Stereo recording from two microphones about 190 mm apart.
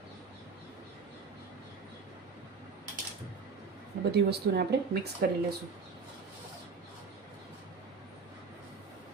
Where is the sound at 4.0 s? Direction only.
60° right (ahead or behind).